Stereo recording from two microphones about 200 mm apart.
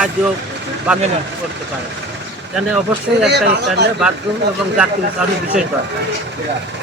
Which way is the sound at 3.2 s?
55° right (ahead or behind).